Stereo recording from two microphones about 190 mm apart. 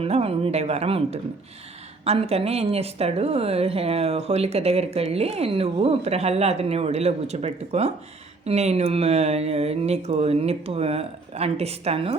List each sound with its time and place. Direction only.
0.0 s a woman's voice: 30° right (ahead or behind)